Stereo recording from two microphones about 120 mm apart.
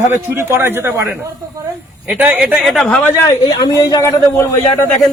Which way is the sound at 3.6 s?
30° left (ahead or behind).